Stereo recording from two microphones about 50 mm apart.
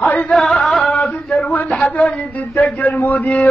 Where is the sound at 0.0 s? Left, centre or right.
Left.